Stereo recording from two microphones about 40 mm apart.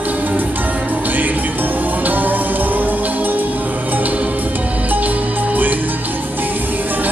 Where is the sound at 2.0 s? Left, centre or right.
Right.